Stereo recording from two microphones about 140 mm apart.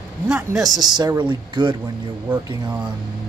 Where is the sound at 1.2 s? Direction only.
35° right (ahead or behind).